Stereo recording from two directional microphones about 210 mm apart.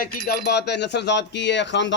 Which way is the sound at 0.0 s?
50° left (ahead or behind).